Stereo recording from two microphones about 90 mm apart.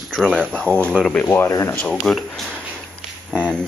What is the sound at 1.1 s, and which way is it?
Speech, 25° left (ahead or behind).